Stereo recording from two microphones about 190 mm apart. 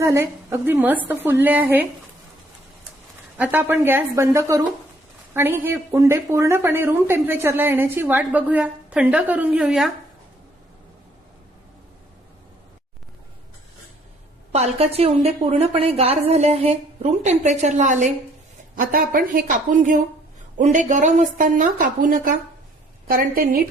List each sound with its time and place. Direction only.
0.0 s speech: 15° right (ahead or behind)
3.3 s speech: 10° right (ahead or behind)
14.5 s a woman's voice: 35° right (ahead or behind)